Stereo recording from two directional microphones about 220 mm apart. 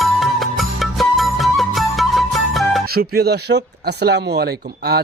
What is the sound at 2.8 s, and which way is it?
Speech, 45° right (ahead or behind).